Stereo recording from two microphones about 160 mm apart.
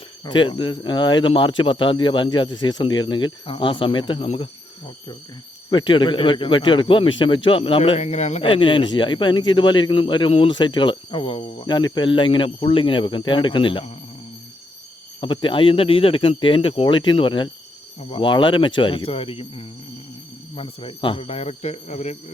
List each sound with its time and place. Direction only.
0.3 s a man's voice: 30° left (ahead or behind)
5.7 s a man's voice: 30° left (ahead or behind)
15.2 s a man's voice: 30° left (ahead or behind)